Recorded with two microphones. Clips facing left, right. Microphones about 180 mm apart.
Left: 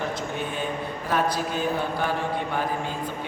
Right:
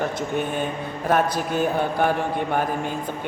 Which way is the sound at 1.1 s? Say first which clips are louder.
Right 4 dB; 55° right (ahead or behind).